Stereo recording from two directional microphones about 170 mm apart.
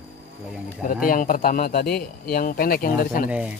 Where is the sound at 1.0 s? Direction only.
55° left (ahead or behind).